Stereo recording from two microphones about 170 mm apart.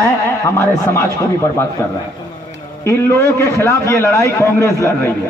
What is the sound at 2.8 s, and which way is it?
A man's voice, 15° left (ahead or behind).